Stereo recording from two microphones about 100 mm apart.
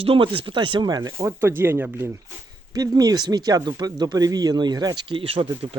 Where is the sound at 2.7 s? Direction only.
40° right (ahead or behind).